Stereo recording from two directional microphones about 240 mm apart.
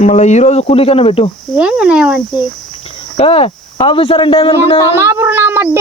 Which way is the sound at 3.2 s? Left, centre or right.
Left.